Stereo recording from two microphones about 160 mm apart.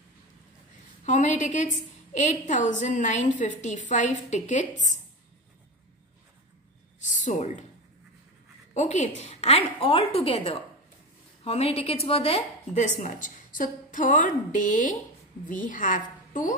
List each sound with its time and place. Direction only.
1.0 s a woman's voice: 50° left (ahead or behind)
7.0 s a sound: 50° left (ahead or behind)
8.7 s a woman's voice: 45° left (ahead or behind)